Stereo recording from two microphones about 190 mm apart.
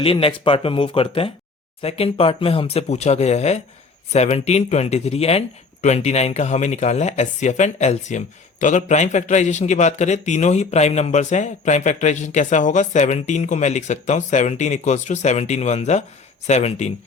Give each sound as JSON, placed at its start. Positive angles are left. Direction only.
{"t": 0.0, "sound": "a man's voice", "side_deg": 30}